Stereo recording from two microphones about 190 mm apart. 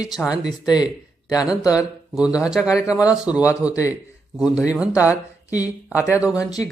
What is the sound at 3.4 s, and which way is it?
Speech, 15° left (ahead or behind).